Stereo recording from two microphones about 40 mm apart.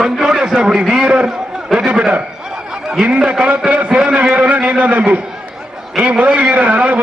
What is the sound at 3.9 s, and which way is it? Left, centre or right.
A man's voice, right.